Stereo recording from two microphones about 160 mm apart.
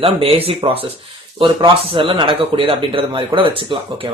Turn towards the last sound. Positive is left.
turn(degrees=-30)  # may be behind; listen again after turning